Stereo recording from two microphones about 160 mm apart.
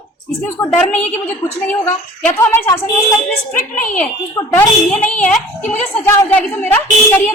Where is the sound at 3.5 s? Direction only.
55° left (ahead or behind).